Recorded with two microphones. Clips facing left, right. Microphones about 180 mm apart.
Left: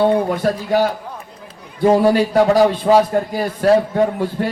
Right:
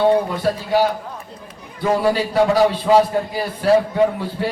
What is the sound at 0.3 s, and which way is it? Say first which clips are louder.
Speech: left 2 dB; 50° left (ahead or behind).